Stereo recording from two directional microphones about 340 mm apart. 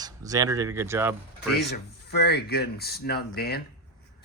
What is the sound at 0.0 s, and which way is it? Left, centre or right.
Speech, centre.